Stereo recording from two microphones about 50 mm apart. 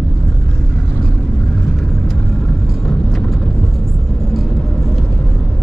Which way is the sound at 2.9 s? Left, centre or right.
Centre.